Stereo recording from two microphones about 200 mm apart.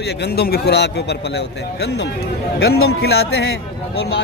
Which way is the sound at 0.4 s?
55° left (ahead or behind).